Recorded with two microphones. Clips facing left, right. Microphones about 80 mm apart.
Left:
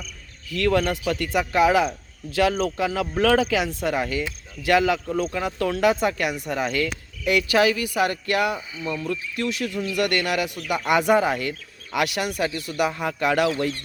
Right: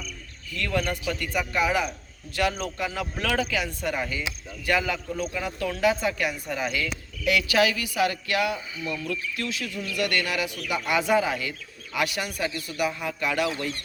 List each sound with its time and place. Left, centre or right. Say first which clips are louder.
0.5 s speech: left 8 dB; left
1.2 s speech: left 7 dB; left
5.1 s speech: left 5 dB; left
5.4 s speech: left 3 dB; left
7.3 s a man's voice: left 3 dB; left
8.8 s a man's voice: left 4 dB; left
9.5 s speech: left 6 dB; left
11.9 s speech: left 4 dB; left